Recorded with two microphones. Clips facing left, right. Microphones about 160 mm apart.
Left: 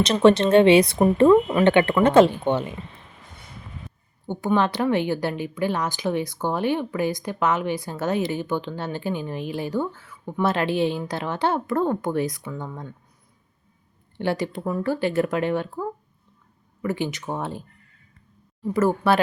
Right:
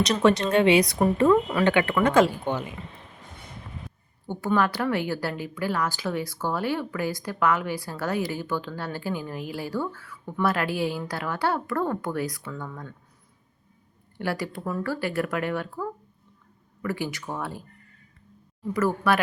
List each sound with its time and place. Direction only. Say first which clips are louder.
0.0 s a woman's voice: left 4 dB; 20° left (ahead or behind)
4.3 s a woman's voice: left 2 dB; 20° left (ahead or behind)
14.2 s a woman's voice: left 4 dB; 25° left (ahead or behind)
18.7 s a woman's voice: left 3 dB; 30° left (ahead or behind)